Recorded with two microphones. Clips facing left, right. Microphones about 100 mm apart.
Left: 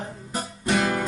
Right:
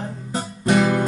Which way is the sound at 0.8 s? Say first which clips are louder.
Right 5 dB; 20° right (ahead or behind).